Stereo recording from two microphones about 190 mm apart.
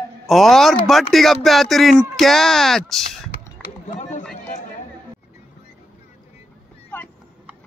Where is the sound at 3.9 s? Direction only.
40° left (ahead or behind).